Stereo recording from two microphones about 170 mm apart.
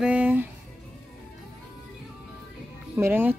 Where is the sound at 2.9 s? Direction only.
10° right (ahead or behind).